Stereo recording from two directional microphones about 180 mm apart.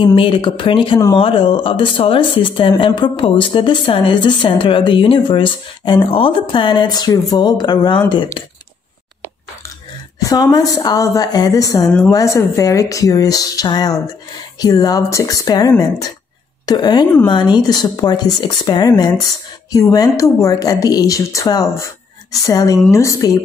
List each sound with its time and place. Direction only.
0.0 s speech: 30° left (ahead or behind)
10.2 s speech: 20° left (ahead or behind)